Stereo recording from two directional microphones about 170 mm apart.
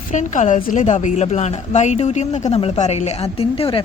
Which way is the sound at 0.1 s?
45° left (ahead or behind).